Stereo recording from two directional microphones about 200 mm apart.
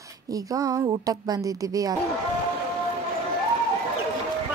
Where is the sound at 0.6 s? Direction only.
20° right (ahead or behind).